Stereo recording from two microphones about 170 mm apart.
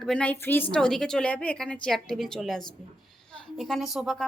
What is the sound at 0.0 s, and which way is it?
A woman's voice, 5° left (ahead or behind).